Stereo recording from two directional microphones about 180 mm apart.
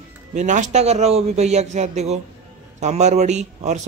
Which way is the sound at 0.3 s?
40° right (ahead or behind).